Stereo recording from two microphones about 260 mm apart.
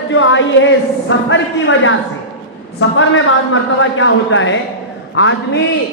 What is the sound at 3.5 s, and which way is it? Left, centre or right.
A woman's voice, left.